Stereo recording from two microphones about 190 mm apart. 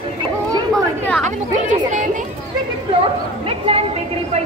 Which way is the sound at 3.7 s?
30° right (ahead or behind).